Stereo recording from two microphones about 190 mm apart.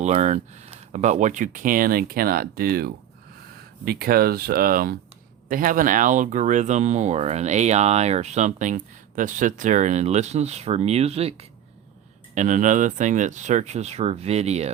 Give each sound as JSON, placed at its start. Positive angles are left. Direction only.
{"t": 0.0, "sound": "speech", "side_deg": -35}